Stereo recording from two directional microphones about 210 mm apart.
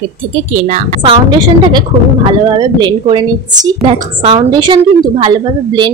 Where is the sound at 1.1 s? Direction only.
20° right (ahead or behind).